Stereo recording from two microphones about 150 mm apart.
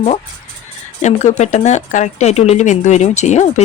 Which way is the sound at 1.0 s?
50° left (ahead or behind).